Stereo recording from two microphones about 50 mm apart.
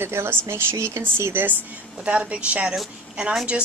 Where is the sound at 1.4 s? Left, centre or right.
Right.